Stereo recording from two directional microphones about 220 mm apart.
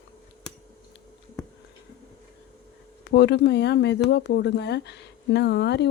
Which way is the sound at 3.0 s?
50° left (ahead or behind).